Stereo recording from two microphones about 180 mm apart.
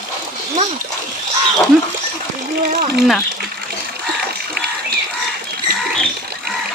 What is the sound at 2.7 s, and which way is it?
Speech, 65° right (ahead or behind).